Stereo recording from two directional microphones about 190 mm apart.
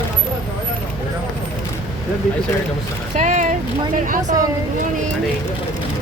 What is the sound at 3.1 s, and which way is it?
Speech, 40° right (ahead or behind).